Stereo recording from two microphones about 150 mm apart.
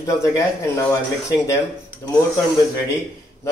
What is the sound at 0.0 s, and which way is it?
Speech, 20° left (ahead or behind).